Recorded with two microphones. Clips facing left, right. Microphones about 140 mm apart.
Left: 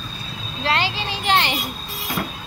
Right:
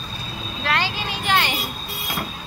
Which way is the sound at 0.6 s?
25° left (ahead or behind).